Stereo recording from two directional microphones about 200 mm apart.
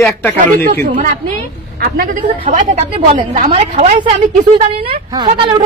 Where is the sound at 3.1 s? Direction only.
25° right (ahead or behind).